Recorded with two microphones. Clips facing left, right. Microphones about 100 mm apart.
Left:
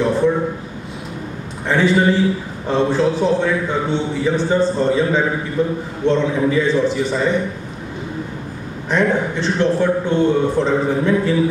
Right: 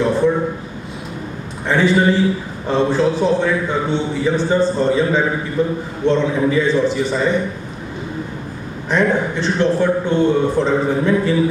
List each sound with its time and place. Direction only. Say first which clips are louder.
0.0 s a sound: right 1 dB; 35° right (ahead or behind)
1.7 s a man's voice: even; 25° right (ahead or behind)
8.8 s a man's voice: right 1 dB; 30° right (ahead or behind)